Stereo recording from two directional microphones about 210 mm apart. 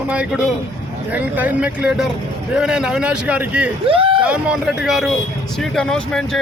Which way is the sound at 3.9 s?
25° right (ahead or behind).